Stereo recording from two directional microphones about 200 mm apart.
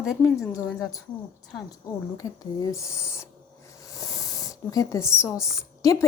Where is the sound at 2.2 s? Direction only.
15° left (ahead or behind).